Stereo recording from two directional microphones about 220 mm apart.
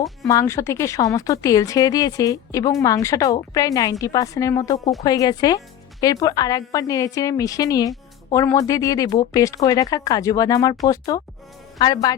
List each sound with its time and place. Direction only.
0.3 s a woman's voice: 15° left (ahead or behind)